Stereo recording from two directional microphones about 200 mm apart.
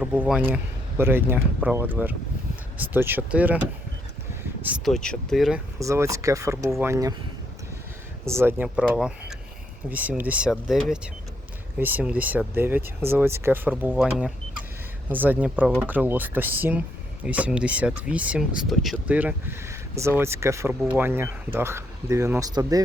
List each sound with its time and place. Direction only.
0.0 s speech: 5° right (ahead or behind)
4.6 s speech: centre (ahead or behind)
5.8 s speech: 15° right (ahead or behind)
8.2 s speech: 15° right (ahead or behind)